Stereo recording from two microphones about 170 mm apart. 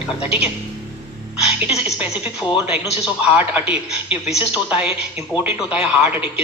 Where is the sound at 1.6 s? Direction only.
10° right (ahead or behind).